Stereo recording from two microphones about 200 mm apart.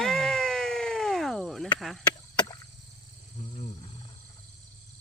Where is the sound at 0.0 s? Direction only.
Centre (ahead or behind).